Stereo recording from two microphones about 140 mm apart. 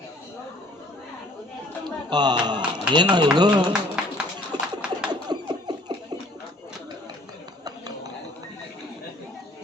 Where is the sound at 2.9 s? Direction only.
30° right (ahead or behind).